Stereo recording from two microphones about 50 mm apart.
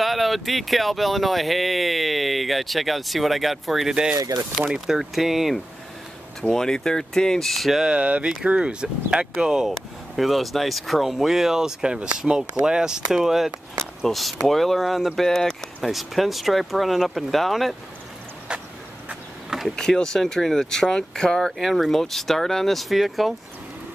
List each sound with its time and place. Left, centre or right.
0.0 s speech: centre
6.5 s speech: centre
7.8 s speech: right
9.7 s speech: centre
14.0 s speech: centre
15.1 s speech: centre
18.5 s vehicle: centre
19.7 s speech: centre
21.5 s speech: centre